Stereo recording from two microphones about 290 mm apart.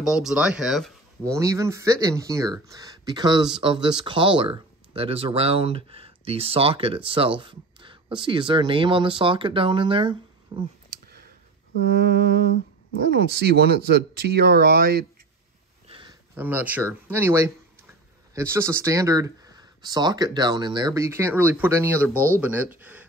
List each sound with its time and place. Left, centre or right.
0.0 s speech: centre
11.1 s a sound: right
12.0 s speech: right
16.3 s speech: centre